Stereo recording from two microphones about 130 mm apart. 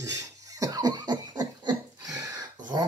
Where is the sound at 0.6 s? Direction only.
30° right (ahead or behind).